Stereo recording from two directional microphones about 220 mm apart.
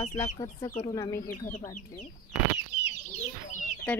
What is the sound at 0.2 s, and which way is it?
Speech, 20° left (ahead or behind).